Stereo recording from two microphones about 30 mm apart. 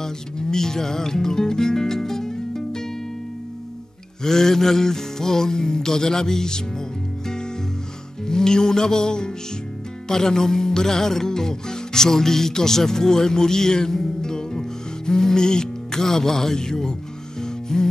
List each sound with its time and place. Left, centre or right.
0.0 s speech: centre
4.2 s music: centre
8.3 s music: left